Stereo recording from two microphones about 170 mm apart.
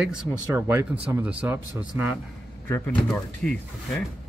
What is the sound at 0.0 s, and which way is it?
Speech, 5° right (ahead or behind).